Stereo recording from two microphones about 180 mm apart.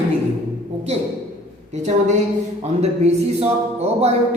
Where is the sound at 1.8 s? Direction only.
40° right (ahead or behind).